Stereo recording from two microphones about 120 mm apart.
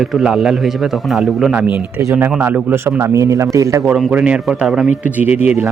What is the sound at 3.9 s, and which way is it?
Speech, 10° right (ahead or behind).